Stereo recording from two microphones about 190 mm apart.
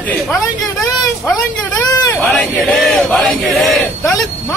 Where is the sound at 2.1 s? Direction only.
5° left (ahead or behind).